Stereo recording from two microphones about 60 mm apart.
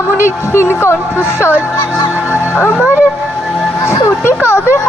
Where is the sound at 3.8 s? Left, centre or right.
Left.